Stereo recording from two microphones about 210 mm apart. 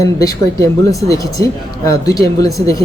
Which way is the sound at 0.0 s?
15° left (ahead or behind).